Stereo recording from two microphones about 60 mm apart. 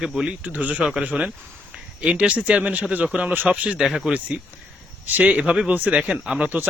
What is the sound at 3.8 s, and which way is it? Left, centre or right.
Speech, centre.